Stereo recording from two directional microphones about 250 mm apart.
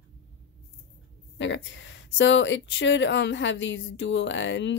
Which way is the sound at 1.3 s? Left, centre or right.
Left.